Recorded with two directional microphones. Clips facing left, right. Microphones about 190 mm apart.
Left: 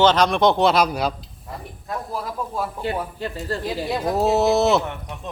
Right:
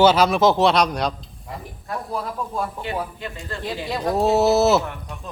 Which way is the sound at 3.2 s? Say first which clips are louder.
Left 5 dB; 35° left (ahead or behind).